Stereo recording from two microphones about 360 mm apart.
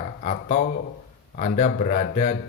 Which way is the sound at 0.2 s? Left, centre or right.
Centre.